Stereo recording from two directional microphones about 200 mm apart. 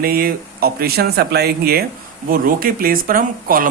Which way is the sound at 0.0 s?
50° right (ahead or behind).